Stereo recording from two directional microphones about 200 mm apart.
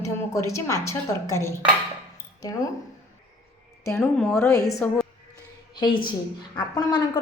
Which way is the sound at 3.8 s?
10° left (ahead or behind).